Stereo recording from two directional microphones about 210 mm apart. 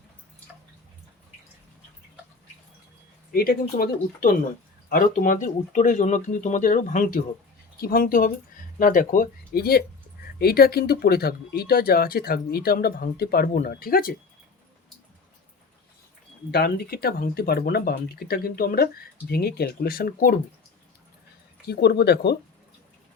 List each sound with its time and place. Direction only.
3.3 s speech: 45° left (ahead or behind)
16.5 s speech: 50° left (ahead or behind)
21.7 s speech: 50° left (ahead or behind)